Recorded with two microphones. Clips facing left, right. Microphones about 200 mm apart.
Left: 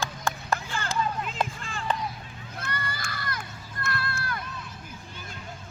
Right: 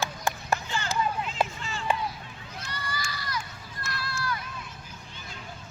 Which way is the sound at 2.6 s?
55° left (ahead or behind).